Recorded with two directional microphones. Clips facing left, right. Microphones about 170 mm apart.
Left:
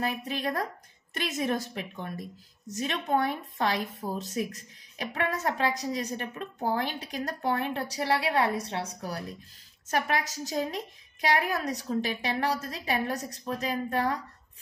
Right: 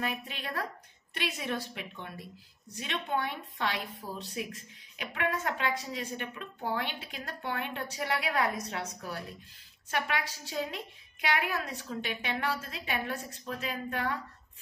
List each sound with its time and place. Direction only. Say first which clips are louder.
0.0 s a woman's voice: left 6 dB; 40° left (ahead or behind)